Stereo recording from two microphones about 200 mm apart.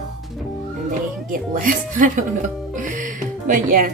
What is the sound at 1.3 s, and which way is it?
A woman's voice, 45° right (ahead or behind).